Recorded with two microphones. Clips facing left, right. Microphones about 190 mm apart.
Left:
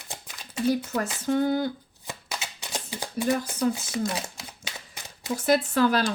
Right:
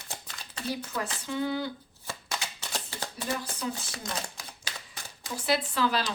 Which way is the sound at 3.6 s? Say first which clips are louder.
Left 10 dB; 50° left (ahead or behind).